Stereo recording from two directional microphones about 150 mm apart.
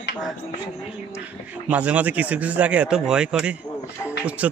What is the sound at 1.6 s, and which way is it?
Speech, 10° right (ahead or behind).